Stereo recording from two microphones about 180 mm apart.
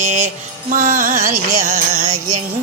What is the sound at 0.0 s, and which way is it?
Music, 45° right (ahead or behind).